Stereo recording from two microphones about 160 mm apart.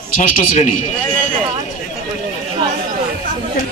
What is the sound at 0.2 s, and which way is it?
Speech, 50° left (ahead or behind).